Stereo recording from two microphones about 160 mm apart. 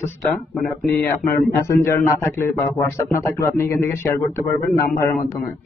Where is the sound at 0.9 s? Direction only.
15° left (ahead or behind).